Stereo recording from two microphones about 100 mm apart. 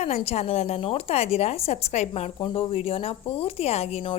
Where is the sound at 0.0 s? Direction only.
90° left.